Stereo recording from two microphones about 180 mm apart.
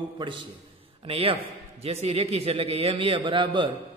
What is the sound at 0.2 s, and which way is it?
A man's voice, 25° right (ahead or behind).